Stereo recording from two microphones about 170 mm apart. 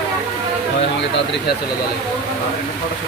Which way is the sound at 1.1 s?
90° left.